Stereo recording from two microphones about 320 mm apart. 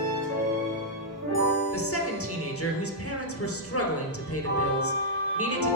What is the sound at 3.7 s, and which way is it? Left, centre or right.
Speech, left.